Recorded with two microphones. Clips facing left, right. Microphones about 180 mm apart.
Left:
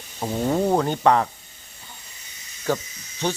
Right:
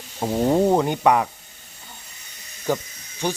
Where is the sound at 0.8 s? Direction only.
15° right (ahead or behind).